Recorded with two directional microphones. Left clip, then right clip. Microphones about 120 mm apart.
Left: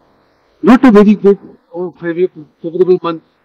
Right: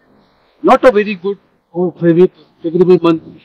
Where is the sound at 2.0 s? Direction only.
20° left (ahead or behind).